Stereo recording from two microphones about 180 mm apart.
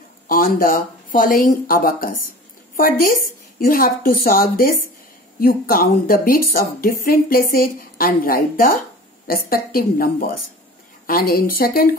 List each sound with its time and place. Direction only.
0.3 s a woman's voice: 50° left (ahead or behind)